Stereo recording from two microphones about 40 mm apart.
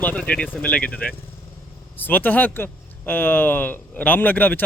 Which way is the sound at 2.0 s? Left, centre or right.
Left.